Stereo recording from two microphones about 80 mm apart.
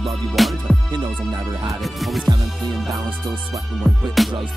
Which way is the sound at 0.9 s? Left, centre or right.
Right.